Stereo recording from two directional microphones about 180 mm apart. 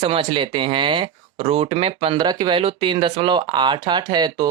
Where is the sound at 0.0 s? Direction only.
30° right (ahead or behind).